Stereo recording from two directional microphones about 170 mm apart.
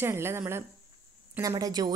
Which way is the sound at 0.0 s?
15° right (ahead or behind).